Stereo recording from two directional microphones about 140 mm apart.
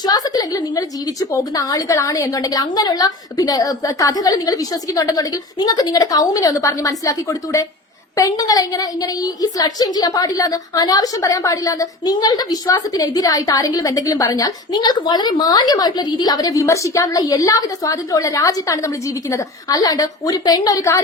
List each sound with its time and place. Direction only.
0.0 s a woman's voice: 25° left (ahead or behind)